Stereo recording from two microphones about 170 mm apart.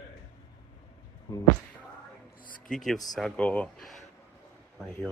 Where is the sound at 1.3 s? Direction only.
20° left (ahead or behind).